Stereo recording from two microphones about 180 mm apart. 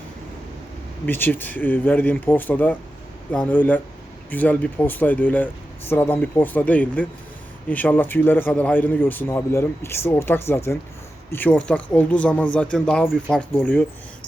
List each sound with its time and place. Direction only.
1.0 s speech: 10° left (ahead or behind)